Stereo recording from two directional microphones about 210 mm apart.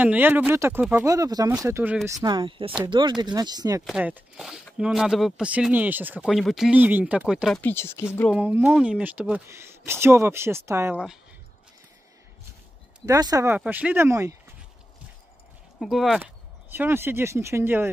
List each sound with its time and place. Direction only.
0.0 s speech: 10° right (ahead or behind)
2.2 s speech: 20° right (ahead or behind)
3.8 s speech: 5° right (ahead or behind); by 8.3 s 10° left (ahead or behind)
8.3 s speech: 10° right (ahead or behind)
13.0 s speech: 15° right (ahead or behind)
15.8 s speech: centre (ahead or behind)